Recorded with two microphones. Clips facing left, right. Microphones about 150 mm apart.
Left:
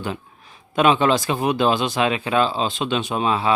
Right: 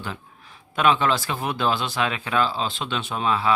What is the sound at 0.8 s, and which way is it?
Speech, 20° left (ahead or behind).